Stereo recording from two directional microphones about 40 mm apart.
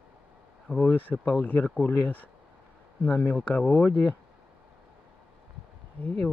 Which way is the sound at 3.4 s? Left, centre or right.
Left.